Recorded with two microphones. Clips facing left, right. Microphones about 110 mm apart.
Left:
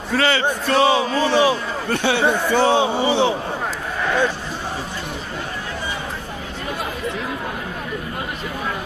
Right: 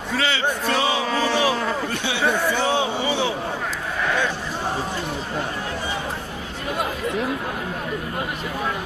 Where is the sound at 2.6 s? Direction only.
30° left (ahead or behind).